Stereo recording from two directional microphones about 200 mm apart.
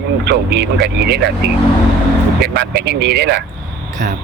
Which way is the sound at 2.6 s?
55° right (ahead or behind).